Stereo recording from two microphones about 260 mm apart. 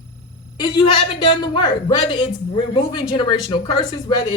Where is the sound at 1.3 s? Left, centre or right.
Centre.